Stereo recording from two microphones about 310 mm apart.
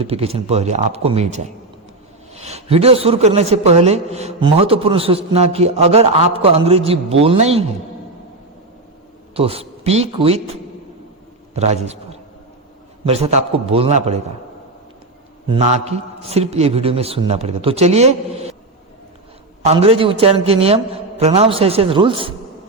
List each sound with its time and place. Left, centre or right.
0.0 s a man's voice: centre
9.3 s a man's voice: centre
11.5 s a man's voice: right
13.1 s a man's voice: centre
15.4 s a man's voice: centre
19.6 s a man's voice: centre